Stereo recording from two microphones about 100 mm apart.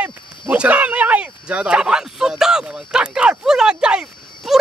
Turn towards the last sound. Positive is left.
turn(degrees=-10)  # may be behind; listen again after turning